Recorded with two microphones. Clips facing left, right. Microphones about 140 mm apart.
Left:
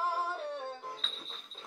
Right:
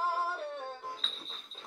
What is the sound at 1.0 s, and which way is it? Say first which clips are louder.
Music: even; centre (ahead or behind).